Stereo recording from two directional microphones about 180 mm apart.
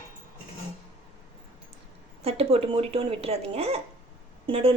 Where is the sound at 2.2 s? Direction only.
35° right (ahead or behind).